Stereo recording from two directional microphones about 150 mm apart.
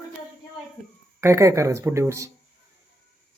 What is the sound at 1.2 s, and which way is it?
Speech, 20° right (ahead or behind).